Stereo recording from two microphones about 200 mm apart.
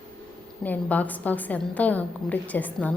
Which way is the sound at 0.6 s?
10° left (ahead or behind).